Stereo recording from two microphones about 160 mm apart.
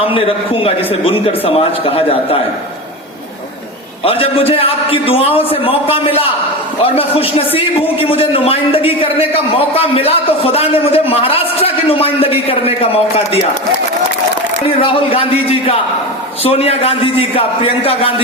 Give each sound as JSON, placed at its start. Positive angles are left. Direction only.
{"t": 0.0, "sound": "a man's voice", "side_deg": 35}
{"t": 4.0, "sound": "a man's voice", "side_deg": 35}
{"t": 14.8, "sound": "a man's voice", "side_deg": 35}